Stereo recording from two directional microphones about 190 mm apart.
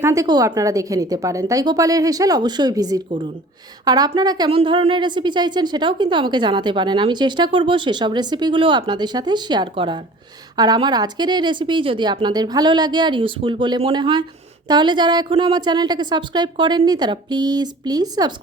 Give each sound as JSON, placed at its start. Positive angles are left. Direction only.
{"t": 0.0, "sound": "a woman's voice", "side_deg": -15}